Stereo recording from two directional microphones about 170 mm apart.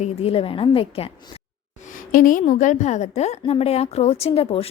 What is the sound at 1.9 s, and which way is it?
A woman's voice, 50° left (ahead or behind).